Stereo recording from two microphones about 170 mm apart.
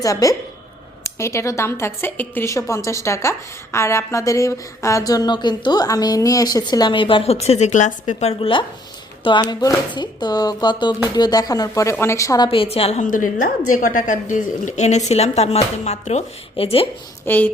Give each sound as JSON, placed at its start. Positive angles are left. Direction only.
{"t": 0.0, "sound": "a woman's voice", "side_deg": 20}
{"t": 12.5, "sound": "a woman's voice", "side_deg": 35}
{"t": 17.2, "sound": "a woman's voice", "side_deg": 10}